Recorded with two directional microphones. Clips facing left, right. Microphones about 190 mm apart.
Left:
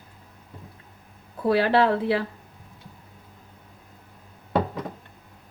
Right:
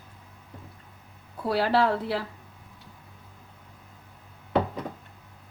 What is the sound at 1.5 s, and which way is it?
Speech, 60° left (ahead or behind).